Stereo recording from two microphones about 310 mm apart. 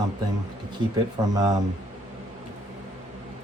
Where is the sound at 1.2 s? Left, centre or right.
Centre.